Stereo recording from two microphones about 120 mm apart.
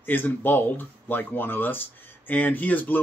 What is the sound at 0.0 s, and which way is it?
Speech, 15° left (ahead or behind).